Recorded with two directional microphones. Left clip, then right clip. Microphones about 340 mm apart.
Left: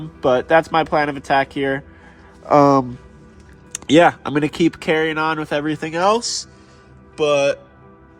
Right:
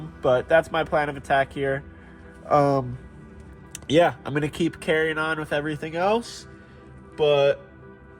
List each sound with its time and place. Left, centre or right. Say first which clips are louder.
0.2 s speech: left 5 dB; left